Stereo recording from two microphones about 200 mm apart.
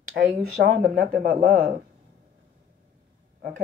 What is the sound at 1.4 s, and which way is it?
Speech, 45° right (ahead or behind).